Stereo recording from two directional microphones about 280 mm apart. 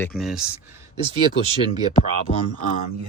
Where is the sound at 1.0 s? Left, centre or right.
Centre.